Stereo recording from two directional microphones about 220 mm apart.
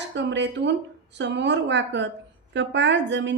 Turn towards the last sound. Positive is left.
turn(degrees=-55)  # may be behind; listen again after turning